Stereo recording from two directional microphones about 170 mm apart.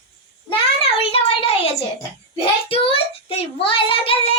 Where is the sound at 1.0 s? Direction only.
35° left (ahead or behind).